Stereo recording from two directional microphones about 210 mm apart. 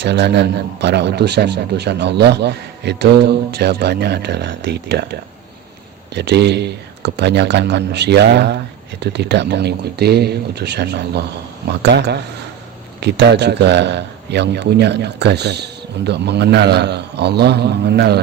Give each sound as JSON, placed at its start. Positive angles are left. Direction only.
{"t": 0.0, "sound": "a man's voice", "side_deg": -55}
{"t": 6.1, "sound": "a man's voice", "side_deg": -55}